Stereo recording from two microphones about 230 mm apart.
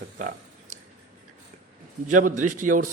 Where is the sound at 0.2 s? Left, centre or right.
Right.